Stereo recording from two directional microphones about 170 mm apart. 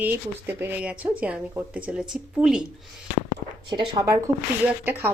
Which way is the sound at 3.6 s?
20° right (ahead or behind).